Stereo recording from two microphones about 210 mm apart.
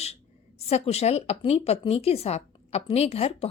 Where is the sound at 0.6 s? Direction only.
30° left (ahead or behind).